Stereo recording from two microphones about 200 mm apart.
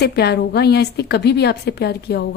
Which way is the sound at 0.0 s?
55° left (ahead or behind).